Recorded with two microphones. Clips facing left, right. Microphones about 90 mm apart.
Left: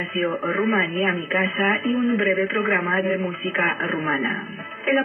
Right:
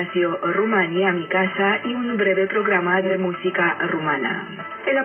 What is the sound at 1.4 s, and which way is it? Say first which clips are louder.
Speech: right 1 dB; 20° right (ahead or behind).